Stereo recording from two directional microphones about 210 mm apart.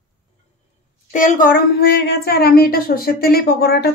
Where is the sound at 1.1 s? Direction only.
40° left (ahead or behind).